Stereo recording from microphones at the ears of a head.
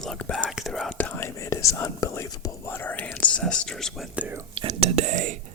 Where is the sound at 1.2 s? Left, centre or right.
Left.